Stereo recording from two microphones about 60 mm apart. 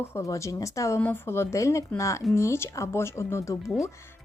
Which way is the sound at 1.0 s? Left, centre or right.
Left.